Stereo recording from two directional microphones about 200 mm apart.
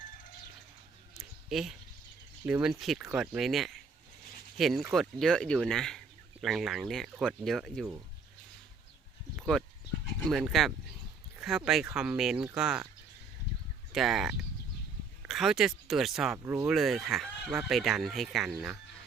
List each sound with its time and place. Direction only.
1.2 s a sound: centre (ahead or behind)
2.5 s speech: 5° right (ahead or behind)
9.3 s a sound: centre (ahead or behind)
10.2 s speech: centre (ahead or behind)
13.9 s speech: centre (ahead or behind)
16.4 s speech: 15° right (ahead or behind)
16.6 s speech: centre (ahead or behind)